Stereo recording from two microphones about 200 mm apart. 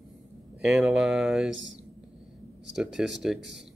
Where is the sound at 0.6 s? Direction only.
Centre (ahead or behind).